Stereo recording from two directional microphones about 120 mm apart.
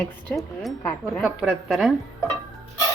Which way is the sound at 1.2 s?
5° right (ahead or behind).